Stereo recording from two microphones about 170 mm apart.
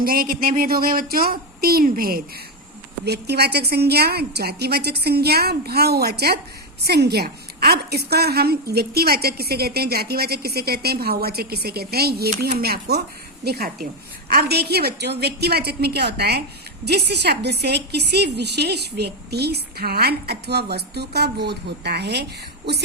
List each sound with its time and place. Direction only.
0.0 s speech: 60° right (ahead or behind)
3.0 s a woman's voice: 75° right (ahead or behind)